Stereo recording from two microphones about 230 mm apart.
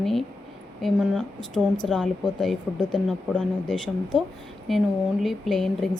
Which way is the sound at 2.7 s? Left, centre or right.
Centre.